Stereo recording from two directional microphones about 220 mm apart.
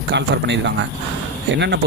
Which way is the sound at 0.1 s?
50° right (ahead or behind).